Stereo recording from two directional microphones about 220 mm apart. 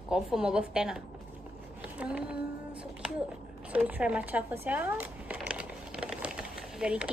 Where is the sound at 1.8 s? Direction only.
5° right (ahead or behind).